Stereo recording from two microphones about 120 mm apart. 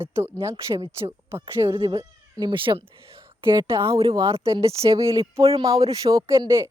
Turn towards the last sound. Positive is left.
turn(degrees=-25)  # may be behind; listen again after turning